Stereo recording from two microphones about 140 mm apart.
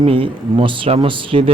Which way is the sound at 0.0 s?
40° right (ahead or behind).